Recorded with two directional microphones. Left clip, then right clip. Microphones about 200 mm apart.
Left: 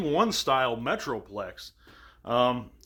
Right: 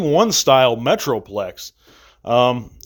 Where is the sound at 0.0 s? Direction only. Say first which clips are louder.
Right 10 dB; 40° right (ahead or behind).